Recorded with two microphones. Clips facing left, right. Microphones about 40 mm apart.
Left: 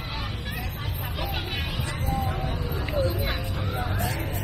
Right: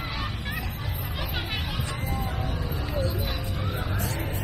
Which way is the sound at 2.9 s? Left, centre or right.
Left.